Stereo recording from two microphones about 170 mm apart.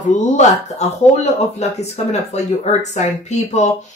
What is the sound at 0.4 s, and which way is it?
Speech, 40° left (ahead or behind).